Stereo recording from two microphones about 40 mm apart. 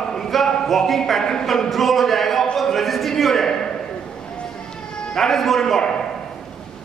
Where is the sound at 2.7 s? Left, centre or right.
Centre.